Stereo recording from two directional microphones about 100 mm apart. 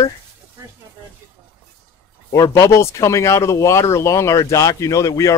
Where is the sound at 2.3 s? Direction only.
35° left (ahead or behind).